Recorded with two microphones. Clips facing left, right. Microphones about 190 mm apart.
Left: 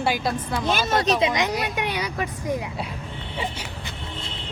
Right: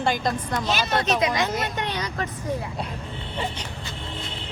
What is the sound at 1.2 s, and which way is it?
A woman's voice, 20° left (ahead or behind).